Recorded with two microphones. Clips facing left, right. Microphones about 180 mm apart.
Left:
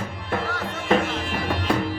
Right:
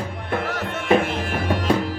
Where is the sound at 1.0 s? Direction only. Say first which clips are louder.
Right 2 dB; 50° right (ahead or behind).